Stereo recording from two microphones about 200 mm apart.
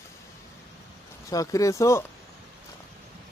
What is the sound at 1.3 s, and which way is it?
Speech, 15° left (ahead or behind).